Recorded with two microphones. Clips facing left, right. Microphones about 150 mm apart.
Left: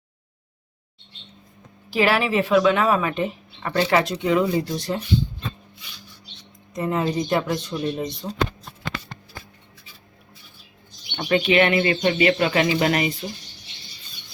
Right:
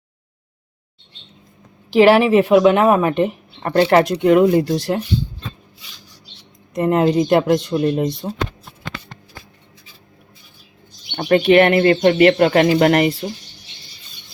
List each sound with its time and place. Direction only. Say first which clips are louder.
1.9 s speech: right 9 dB; 60° right (ahead or behind)
6.7 s speech: right 8 dB; 60° right (ahead or behind)
8.2 s speech: right 5 dB; 40° right (ahead or behind)
11.1 s speech: right 7 dB; 45° right (ahead or behind); by 13.1 s 60° right (ahead or behind)